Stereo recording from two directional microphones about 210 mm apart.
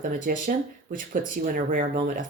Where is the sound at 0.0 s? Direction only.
40° right (ahead or behind).